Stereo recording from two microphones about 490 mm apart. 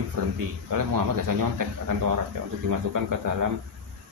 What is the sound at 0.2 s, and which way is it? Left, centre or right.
Speech, right.